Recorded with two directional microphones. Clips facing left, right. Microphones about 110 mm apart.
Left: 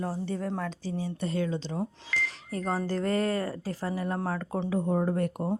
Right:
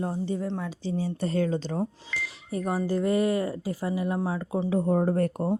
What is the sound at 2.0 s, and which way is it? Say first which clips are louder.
Speech: left 2 dB; 10° right (ahead or behind).